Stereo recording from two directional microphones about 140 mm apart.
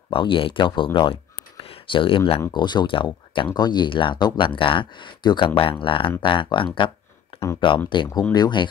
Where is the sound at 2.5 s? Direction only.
30° left (ahead or behind).